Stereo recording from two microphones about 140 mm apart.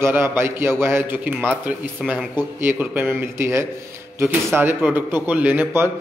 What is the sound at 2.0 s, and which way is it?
Speech, centre (ahead or behind).